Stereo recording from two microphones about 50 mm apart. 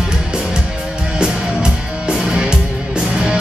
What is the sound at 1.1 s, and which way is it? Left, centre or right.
Music, centre.